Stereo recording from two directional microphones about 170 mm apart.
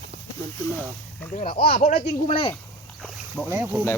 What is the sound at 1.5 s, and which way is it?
Speech, 70° left (ahead or behind).